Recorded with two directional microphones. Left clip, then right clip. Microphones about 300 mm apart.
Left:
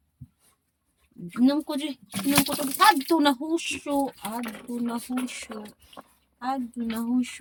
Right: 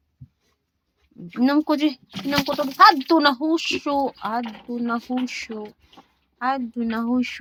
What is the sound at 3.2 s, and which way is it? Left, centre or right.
Speech, centre.